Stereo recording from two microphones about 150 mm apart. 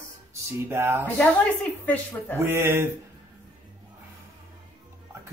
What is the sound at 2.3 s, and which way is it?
Speech, 15° right (ahead or behind).